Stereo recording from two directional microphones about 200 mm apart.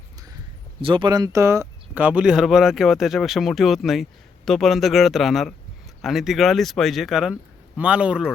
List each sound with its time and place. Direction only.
0.8 s speech: 25° right (ahead or behind); by 8.3 s 5° right (ahead or behind)